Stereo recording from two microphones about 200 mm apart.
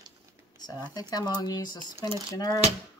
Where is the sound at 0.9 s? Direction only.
20° left (ahead or behind).